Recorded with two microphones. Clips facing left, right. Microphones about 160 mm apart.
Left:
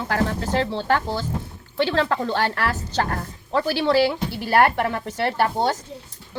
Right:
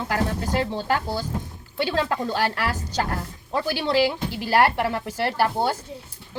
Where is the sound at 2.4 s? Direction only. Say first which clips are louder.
Left 1 dB; 10° right (ahead or behind).